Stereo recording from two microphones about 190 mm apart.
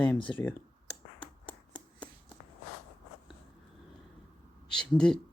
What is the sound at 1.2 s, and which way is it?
Finger snapping, 25° left (ahead or behind).